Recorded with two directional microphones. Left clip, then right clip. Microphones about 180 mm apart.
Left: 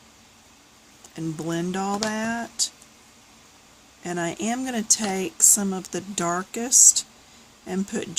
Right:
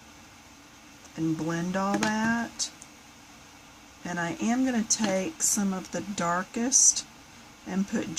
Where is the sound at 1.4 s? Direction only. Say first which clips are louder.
Left 2 dB; 40° left (ahead or behind).